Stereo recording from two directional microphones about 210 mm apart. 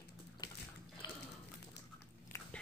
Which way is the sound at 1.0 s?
20° left (ahead or behind).